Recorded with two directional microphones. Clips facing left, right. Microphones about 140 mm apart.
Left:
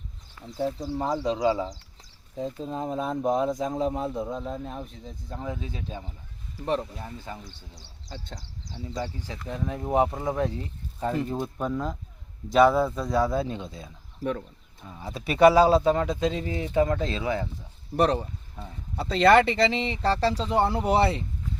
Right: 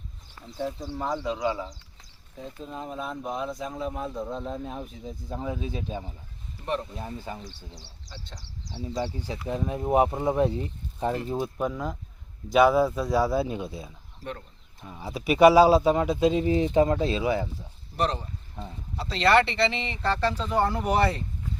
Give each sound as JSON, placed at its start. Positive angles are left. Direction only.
{"t": 0.6, "sound": "speech", "side_deg": 10}
{"t": 0.9, "sound": "speech", "side_deg": 30}
{"t": 3.9, "sound": "speech", "side_deg": 25}
{"t": 4.3, "sound": "speech", "side_deg": 5}
{"t": 8.1, "sound": "speech", "side_deg": 50}
{"t": 9.1, "sound": "speech", "side_deg": -15}
{"t": 11.4, "sound": "speech", "side_deg": -5}
{"t": 14.8, "sound": "speech", "side_deg": -10}
{"t": 17.9, "sound": "speech", "side_deg": 60}